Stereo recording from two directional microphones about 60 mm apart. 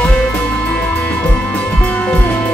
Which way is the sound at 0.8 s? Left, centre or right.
Centre.